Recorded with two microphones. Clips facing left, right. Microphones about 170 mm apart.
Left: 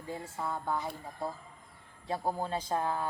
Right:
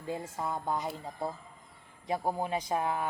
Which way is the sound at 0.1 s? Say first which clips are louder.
Right 2 dB; 15° right (ahead or behind).